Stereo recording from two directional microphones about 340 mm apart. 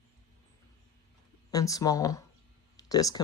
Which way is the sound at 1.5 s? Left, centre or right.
Centre.